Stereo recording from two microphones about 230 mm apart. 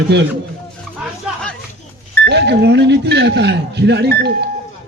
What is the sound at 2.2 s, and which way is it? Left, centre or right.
Speech, right.